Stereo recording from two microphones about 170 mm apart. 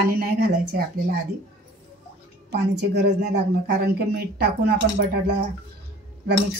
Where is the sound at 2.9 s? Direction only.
80° right.